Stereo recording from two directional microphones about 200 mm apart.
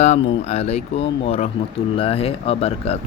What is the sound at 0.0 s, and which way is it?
Speech, 35° left (ahead or behind).